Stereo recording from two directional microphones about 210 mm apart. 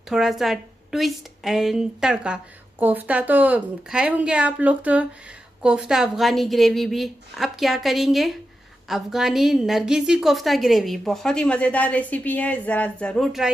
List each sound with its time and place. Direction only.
0.1 s a woman's voice: centre (ahead or behind)